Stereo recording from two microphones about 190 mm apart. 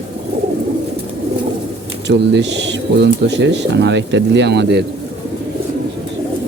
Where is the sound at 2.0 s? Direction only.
65° right (ahead or behind).